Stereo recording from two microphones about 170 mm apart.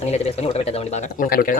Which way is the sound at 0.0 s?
40° left (ahead or behind).